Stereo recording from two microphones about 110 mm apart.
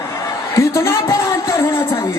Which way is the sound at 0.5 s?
25° left (ahead or behind).